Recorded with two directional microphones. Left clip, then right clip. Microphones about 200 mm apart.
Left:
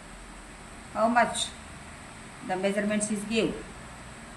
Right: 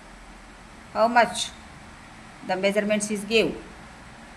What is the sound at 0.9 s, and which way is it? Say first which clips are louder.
Speech: right 4 dB; 45° right (ahead or behind).